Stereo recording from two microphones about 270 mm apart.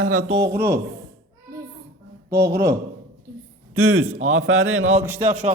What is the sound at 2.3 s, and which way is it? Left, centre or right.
Speech, right.